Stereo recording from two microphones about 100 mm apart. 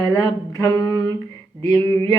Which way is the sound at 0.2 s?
40° left (ahead or behind).